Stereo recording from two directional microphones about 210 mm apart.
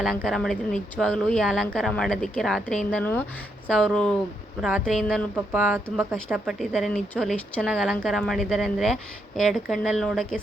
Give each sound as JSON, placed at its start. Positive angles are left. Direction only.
{"t": 0.0, "sound": "speech", "side_deg": 0}